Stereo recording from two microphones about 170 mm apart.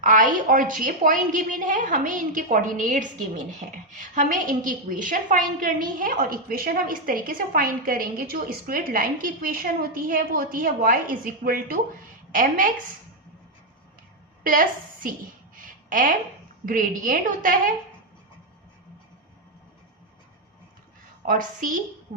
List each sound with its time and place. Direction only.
0.0 s a woman's voice: 50° right (ahead or behind)
14.4 s a woman's voice: 55° right (ahead or behind)
15.5 s a sound: 55° right (ahead or behind)
16.6 s a woman's voice: 50° right (ahead or behind)
21.2 s a woman's voice: 50° right (ahead or behind)